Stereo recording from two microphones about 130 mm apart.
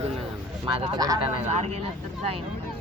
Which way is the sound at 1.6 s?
55° right (ahead or behind).